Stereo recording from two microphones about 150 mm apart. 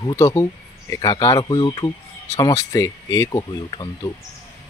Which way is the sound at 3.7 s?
30° left (ahead or behind).